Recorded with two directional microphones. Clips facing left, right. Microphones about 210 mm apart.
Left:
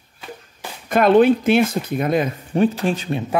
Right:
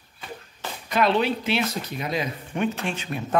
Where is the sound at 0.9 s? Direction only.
50° left (ahead or behind).